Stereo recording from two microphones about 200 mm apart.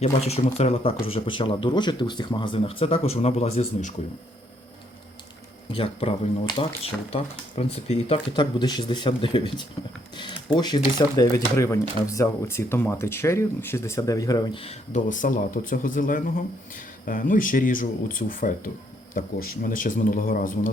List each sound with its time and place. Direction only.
0.0 s speech: 30° left (ahead or behind)
5.7 s speech: 30° left (ahead or behind); by 20.5 s 45° left (ahead or behind)